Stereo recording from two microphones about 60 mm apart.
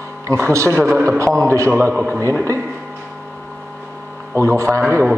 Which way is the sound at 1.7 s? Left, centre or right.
Right.